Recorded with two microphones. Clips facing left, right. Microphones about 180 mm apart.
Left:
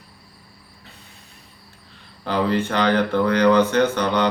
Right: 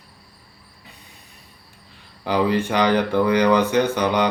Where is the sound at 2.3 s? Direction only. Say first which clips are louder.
Right 1 dB; 10° right (ahead or behind).